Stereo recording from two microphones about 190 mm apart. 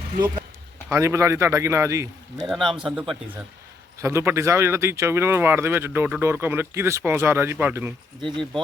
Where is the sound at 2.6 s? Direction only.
25° right (ahead or behind).